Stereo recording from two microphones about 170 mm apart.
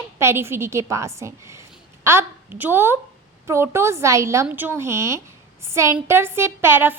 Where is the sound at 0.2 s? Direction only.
15° right (ahead or behind).